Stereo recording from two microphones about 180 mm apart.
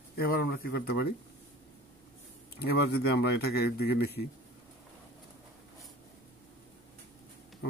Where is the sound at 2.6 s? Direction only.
65° left (ahead or behind).